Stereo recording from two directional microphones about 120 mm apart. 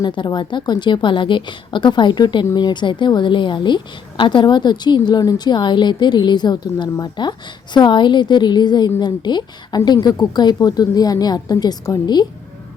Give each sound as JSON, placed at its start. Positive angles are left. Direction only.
{"t": 0.0, "sound": "a woman's voice", "side_deg": 40}